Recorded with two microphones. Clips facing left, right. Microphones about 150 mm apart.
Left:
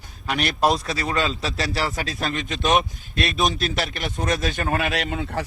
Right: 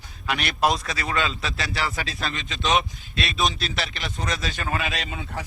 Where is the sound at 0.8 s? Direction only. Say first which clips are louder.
Left 3 dB; 35° left (ahead or behind).